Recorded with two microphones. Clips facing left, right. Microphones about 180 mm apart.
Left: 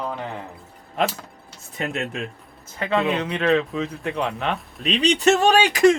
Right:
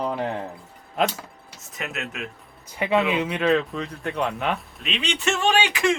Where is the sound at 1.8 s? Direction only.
30° left (ahead or behind).